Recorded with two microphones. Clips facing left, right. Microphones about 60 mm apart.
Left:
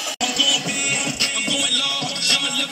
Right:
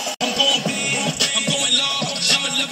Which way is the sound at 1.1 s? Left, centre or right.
Left.